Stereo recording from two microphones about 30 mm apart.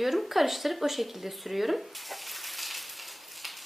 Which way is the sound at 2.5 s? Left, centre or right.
Centre.